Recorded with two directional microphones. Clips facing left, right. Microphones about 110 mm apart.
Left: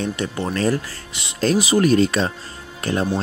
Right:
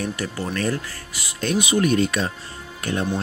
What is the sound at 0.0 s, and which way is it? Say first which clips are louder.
Speech: left 3 dB; 25° left (ahead or behind).